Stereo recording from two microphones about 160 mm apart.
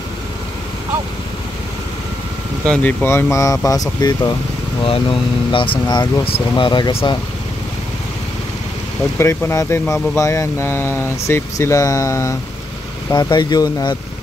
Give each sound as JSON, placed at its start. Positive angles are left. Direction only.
{"t": 2.6, "sound": "speech", "side_deg": 5}
{"t": 4.8, "sound": "speech", "side_deg": 35}
{"t": 9.2, "sound": "speech", "side_deg": 15}